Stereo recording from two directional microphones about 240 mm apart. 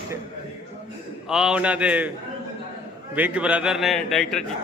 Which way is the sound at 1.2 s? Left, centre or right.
Centre.